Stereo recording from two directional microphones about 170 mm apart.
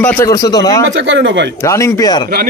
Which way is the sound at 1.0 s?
90° right.